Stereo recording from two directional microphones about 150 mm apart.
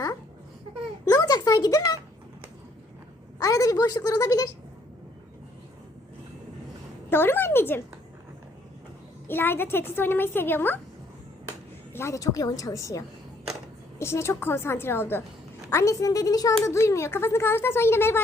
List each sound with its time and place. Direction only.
1.0 s speech: 25° left (ahead or behind)
3.4 s a woman's voice: 25° left (ahead or behind)
7.1 s a woman's voice: 15° left (ahead or behind)
9.2 s a woman's voice: 15° left (ahead or behind)
11.9 s a woman's voice: 20° left (ahead or behind)